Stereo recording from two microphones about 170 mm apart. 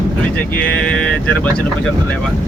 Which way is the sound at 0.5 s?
10° left (ahead or behind).